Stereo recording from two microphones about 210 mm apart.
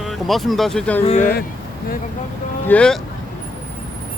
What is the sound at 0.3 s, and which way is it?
Speech, centre (ahead or behind).